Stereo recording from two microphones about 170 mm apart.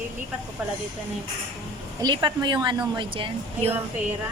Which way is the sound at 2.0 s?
25° right (ahead or behind).